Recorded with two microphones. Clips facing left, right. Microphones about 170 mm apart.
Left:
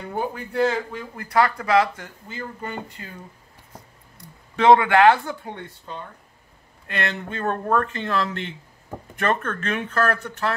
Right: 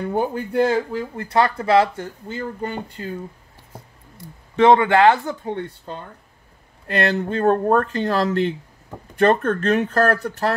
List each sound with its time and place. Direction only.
0.1 s speech: 40° right (ahead or behind)
1.1 s speech: 30° right (ahead or behind)
4.2 s speech: 25° right (ahead or behind)
6.9 s speech: 40° right (ahead or behind)